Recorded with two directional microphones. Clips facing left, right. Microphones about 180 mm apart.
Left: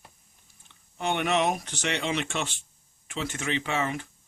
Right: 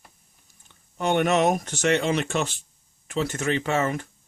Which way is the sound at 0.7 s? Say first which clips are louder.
Right 6 dB; 45° right (ahead or behind).